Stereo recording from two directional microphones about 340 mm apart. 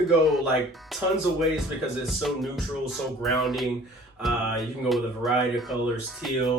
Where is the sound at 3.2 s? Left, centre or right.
Centre.